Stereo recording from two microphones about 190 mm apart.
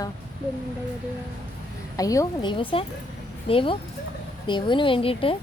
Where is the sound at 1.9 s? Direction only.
20° left (ahead or behind).